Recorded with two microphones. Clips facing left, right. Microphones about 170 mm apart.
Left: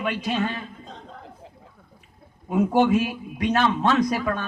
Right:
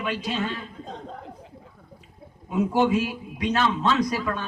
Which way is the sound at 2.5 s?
55° left (ahead or behind).